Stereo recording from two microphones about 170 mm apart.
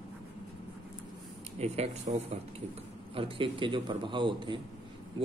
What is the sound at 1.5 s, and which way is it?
A man's voice, 40° right (ahead or behind).